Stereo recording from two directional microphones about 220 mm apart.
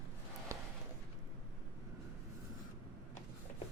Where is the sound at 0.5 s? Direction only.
15° right (ahead or behind).